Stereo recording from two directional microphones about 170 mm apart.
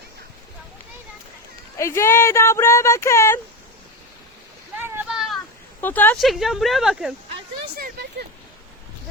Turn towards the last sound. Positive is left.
turn(degrees=-5)  # may be behind; listen again after turning